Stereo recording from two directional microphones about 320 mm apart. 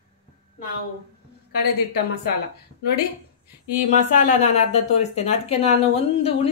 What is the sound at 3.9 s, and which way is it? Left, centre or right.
A woman's voice, left.